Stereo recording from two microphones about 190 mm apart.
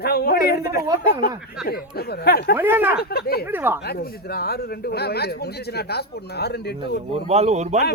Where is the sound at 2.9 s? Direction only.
55° left (ahead or behind).